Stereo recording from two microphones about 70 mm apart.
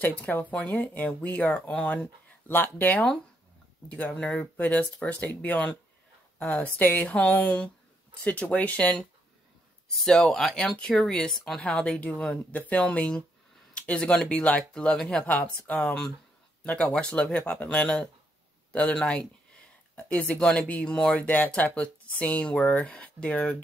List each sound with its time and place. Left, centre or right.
0.0 s speech: left
4.1 s speech: centre
9.8 s speech: centre